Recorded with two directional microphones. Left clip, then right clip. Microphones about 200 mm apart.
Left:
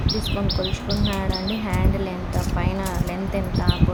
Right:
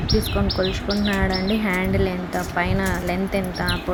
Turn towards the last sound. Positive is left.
turn(degrees=-10)  # may be behind; listen again after turning